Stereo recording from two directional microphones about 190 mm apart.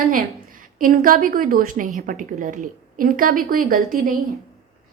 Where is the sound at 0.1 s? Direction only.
45° right (ahead or behind).